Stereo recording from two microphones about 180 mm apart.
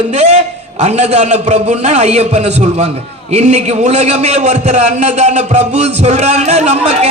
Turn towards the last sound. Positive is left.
turn(degrees=-40)  # may be behind; listen again after turning